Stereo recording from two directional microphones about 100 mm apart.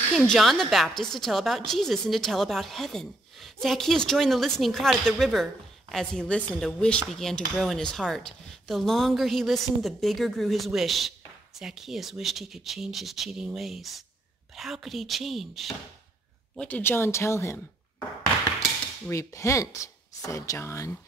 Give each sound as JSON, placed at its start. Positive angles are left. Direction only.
{"t": 0.2, "sound": "speech", "side_deg": 5}
{"t": 16.5, "sound": "speech", "side_deg": 15}
{"t": 19.0, "sound": "speech", "side_deg": 30}